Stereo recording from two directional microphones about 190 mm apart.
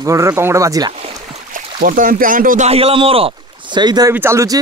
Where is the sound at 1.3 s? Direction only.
45° right (ahead or behind).